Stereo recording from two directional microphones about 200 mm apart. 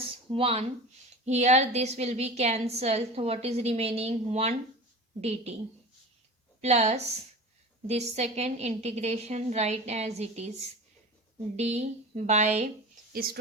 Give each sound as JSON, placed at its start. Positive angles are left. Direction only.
{"t": 0.3, "sound": "a woman's voice", "side_deg": -25}
{"t": 6.6, "sound": "a woman's voice", "side_deg": -30}
{"t": 11.5, "sound": "a woman's voice", "side_deg": -35}
{"t": 13.1, "sound": "speech", "side_deg": -50}